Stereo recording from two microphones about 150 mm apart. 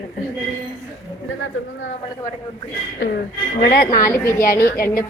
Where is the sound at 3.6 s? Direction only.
90° left.